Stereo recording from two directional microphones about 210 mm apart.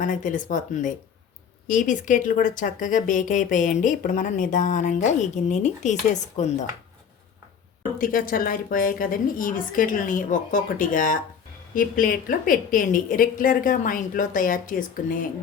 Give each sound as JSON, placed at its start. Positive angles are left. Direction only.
{"t": 0.0, "sound": "speech", "side_deg": 40}
{"t": 7.9, "sound": "speech", "side_deg": 40}